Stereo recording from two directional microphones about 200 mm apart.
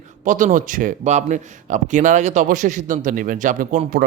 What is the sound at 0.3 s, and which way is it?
A man's voice, 40° right (ahead or behind).